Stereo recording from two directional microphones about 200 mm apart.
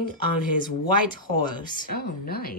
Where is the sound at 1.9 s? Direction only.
50° left (ahead or behind).